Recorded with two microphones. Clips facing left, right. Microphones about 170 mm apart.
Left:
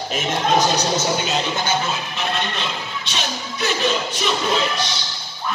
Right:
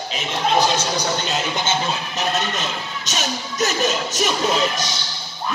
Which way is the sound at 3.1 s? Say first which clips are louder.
Right 2 dB; 45° right (ahead or behind).